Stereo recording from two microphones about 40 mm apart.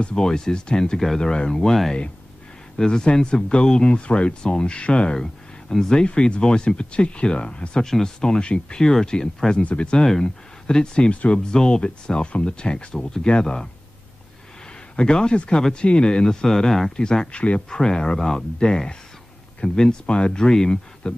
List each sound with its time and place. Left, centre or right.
0.1 s speech: centre
2.8 s speech: left
5.1 s speech: centre
6.0 s speech: left
7.8 s speech: centre
11.1 s speech: left
11.3 s speech: centre
15.0 s speech: left
16.4 s speech: centre
18.6 s speech: left
19.6 s speech: centre